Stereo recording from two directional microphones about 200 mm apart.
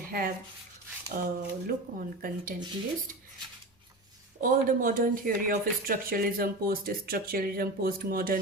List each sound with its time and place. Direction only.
0.1 s speech: 45° right (ahead or behind)
4.4 s speech: 45° right (ahead or behind)